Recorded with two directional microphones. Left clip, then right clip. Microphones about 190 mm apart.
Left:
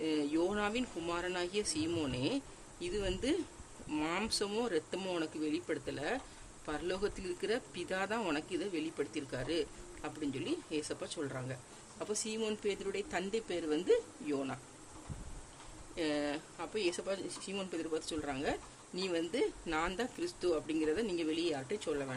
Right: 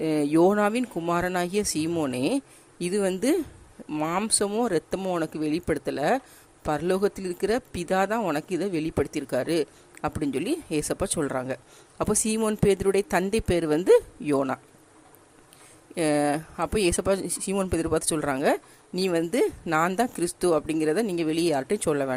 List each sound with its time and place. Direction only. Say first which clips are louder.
0.0 s speech: right 13 dB; 35° right (ahead or behind)
1.9 s speech: right 10 dB; 25° right (ahead or behind)
2.1 s speech: right 10 dB; 35° right (ahead or behind)
3.8 s speech: right 9 dB; 20° right (ahead or behind)
4.6 s speech: right 10 dB; 35° right (ahead or behind)
4.9 s speech: right 10 dB; 20° right (ahead or behind)
5.2 s speech: right 10 dB; 35° right (ahead or behind)
16.0 s speech: right 13 dB; 40° right (ahead or behind)